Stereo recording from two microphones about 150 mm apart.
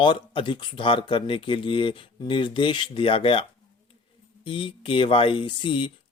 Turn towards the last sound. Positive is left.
turn(degrees=35)  # may be behind; listen again after turning